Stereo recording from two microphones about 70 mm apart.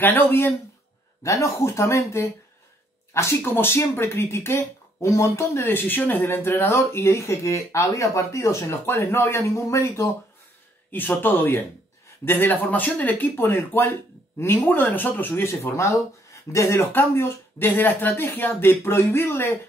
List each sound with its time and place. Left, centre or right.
0.0 s speech: left
1.2 s speech: left
5.6 s speech: left
10.9 s speech: left